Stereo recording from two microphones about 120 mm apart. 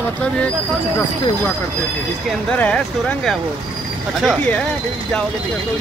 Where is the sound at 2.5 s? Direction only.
10° left (ahead or behind).